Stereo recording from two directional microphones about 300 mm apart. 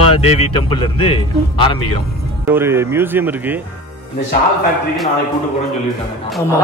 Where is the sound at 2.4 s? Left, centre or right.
Centre.